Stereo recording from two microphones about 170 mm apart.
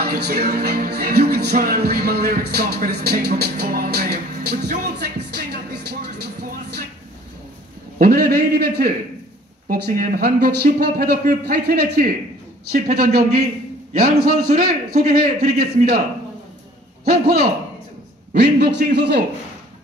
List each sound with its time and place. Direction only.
0.0 s music: 70° right (ahead or behind)
8.0 s speech: 60° right (ahead or behind)
17.0 s speech: 65° right (ahead or behind)
18.3 s a man's voice: 80° right